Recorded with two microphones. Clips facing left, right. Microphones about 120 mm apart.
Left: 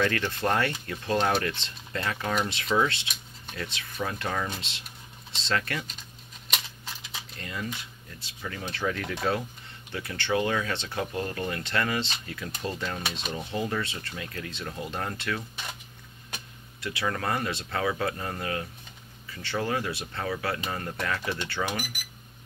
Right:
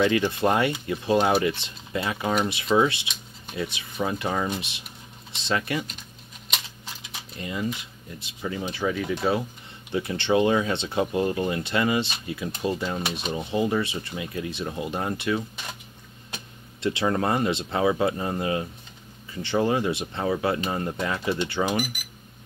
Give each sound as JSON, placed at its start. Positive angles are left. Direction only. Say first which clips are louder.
{"t": 0.3, "sound": "speech", "louder": "right 4 dB", "side_deg": -15}
{"t": 7.3, "sound": "speech", "louder": "right 6 dB", "side_deg": -15}
{"t": 9.8, "sound": "speech", "louder": "right 6 dB", "side_deg": -20}
{"t": 16.8, "sound": "speech", "louder": "right 6 dB", "side_deg": -25}